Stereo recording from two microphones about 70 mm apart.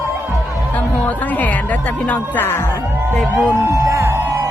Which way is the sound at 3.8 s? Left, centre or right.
Right.